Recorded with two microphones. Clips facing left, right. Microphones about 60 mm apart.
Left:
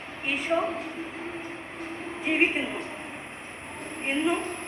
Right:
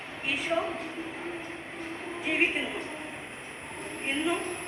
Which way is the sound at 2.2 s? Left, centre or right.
Centre.